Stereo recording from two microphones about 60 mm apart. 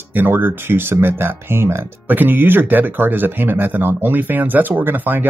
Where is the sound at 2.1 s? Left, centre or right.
Right.